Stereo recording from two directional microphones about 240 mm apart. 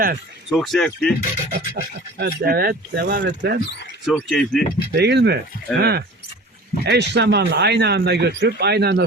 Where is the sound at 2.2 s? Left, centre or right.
Right.